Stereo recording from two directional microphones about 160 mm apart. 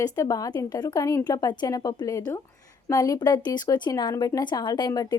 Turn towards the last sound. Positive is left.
turn(degrees=25)  # may be behind; listen again after turning